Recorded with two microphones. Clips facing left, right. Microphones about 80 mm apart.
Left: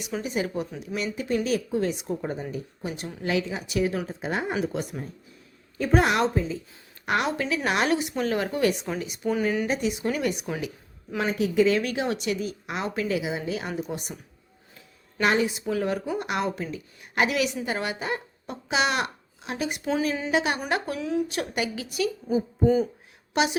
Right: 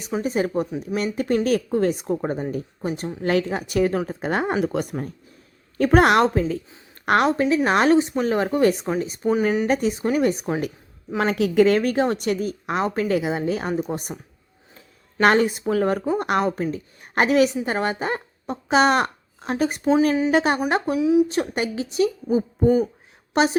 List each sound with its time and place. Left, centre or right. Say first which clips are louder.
0.2 s a woman's voice: right 7 dB; right
3.2 s a woman's voice: right 5 dB; right
7.0 s a woman's voice: right 7 dB; right
7.3 s speech: right 7 dB; right
11.3 s a woman's voice: right 4 dB; right
15.2 s a woman's voice: right 6 dB; right
19.8 s speech: right 9 dB; right
20.3 s speech: right 5 dB; right
20.9 s speech: right 9 dB; centre
21.2 s a woman's voice: right 5 dB; right